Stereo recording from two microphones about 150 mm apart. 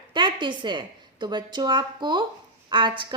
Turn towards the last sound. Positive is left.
turn(degrees=-30)  # may be behind; listen again after turning